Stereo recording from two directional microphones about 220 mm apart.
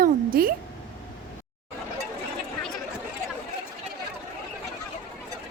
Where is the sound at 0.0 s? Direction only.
40° right (ahead or behind).